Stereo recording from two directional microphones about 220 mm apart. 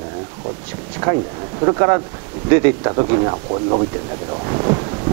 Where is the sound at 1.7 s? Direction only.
20° right (ahead or behind).